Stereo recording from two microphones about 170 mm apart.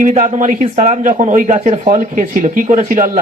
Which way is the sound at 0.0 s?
45° right (ahead or behind).